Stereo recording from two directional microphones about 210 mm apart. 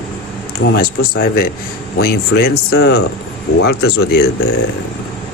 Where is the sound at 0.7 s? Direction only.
45° left (ahead or behind).